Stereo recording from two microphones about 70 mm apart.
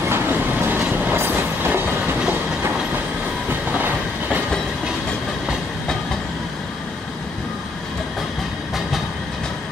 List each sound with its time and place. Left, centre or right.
0.1 s train: right
1.1 s train: right
3.4 s train: right